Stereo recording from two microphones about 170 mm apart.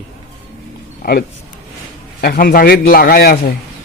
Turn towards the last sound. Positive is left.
turn(degrees=60)  # may be behind; listen again after turning